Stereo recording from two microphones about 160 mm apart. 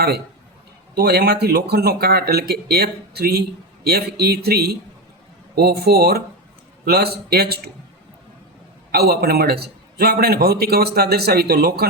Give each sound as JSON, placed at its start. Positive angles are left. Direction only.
{"t": 0.9, "sound": "a man's voice", "side_deg": -85}
{"t": 8.9, "sound": "a man's voice", "side_deg": -75}